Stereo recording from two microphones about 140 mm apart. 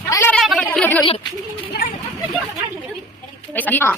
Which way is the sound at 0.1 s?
20° left (ahead or behind).